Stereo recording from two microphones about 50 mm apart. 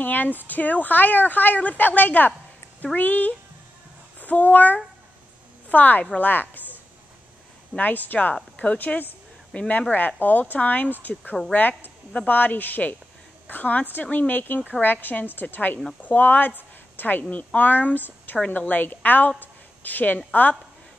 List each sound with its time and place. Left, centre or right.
0.0 s a woman's voice: left
7.7 s a woman's voice: left
9.5 s a woman's voice: left